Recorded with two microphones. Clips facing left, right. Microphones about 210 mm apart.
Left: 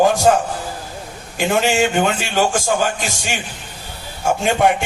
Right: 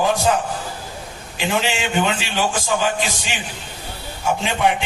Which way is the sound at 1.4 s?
50° left (ahead or behind).